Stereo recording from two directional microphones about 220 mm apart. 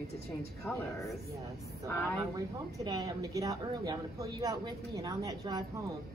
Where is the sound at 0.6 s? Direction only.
15° left (ahead or behind).